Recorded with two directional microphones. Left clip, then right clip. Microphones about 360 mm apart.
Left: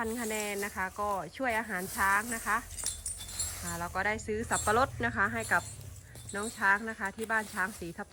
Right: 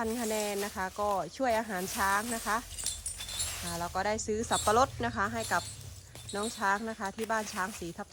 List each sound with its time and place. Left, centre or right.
0.0 s speech: centre